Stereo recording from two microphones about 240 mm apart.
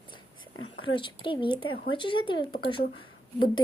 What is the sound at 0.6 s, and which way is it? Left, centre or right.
Speech, left.